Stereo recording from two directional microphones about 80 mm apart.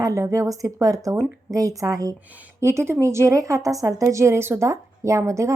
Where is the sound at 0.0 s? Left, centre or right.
Right.